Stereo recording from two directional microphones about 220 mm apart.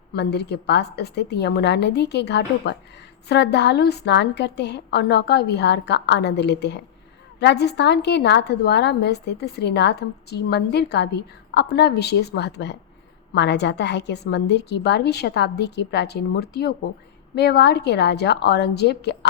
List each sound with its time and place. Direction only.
0.1 s a woman's voice: 50° left (ahead or behind)